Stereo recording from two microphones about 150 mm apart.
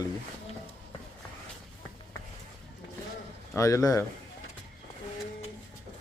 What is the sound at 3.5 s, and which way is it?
Speech, 20° left (ahead or behind).